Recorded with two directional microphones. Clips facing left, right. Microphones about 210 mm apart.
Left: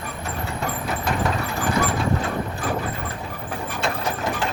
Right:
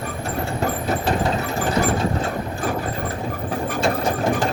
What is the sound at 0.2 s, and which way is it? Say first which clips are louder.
Vehicle: right 5 dB; 35° right (ahead or behind).